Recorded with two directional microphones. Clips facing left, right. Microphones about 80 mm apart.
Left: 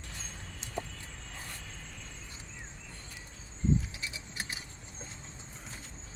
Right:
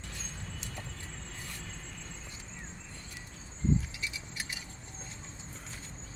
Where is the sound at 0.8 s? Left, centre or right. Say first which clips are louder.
Left 10 dB; left.